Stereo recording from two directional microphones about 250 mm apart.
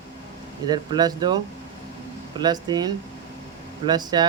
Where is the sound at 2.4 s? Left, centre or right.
Centre.